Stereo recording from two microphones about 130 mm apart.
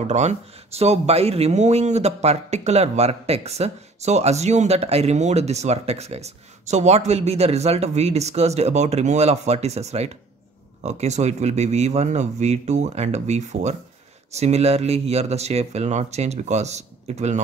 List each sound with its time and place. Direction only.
0.0 s speech: 60° right (ahead or behind)